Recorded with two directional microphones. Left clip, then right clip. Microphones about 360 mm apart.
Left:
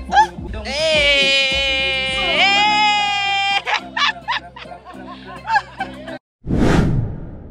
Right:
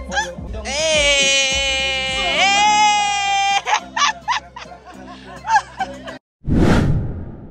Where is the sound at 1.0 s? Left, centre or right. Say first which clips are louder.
Left 1 dB; centre.